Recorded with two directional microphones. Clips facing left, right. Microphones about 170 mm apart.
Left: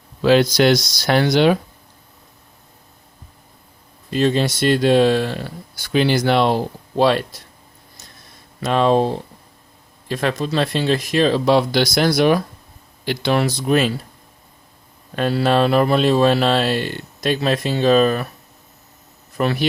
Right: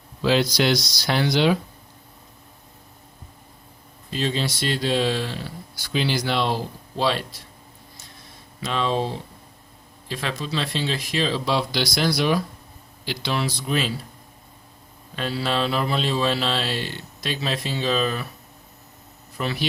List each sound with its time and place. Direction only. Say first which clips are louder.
0.2 s speech: left 6 dB; 55° left (ahead or behind)
4.1 s speech: left 8 dB; 55° left (ahead or behind)
8.6 s speech: left 8 dB; 50° left (ahead or behind)
15.1 s speech: left 8 dB; 55° left (ahead or behind)
19.4 s a man's voice: left 8 dB; 55° left (ahead or behind)